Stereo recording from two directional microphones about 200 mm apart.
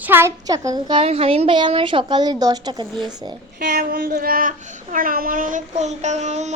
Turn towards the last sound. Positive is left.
turn(degrees=-35)  # may be behind; listen again after turning